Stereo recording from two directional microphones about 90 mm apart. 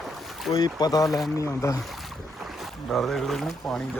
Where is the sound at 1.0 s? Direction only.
Centre (ahead or behind).